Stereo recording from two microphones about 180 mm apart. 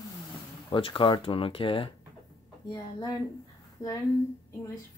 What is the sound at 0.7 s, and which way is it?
A woman's voice, 30° left (ahead or behind).